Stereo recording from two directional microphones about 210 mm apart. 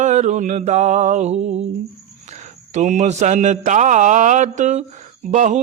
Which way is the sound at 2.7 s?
35° right (ahead or behind).